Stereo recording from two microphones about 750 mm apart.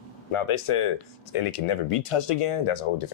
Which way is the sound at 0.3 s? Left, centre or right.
Left.